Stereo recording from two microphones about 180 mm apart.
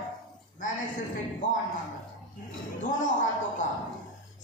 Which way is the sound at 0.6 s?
45° left (ahead or behind).